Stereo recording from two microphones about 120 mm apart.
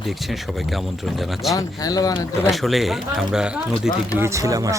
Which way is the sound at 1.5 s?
30° left (ahead or behind).